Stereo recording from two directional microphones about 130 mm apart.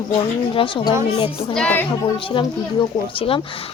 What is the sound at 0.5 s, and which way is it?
Speech, 40° left (ahead or behind).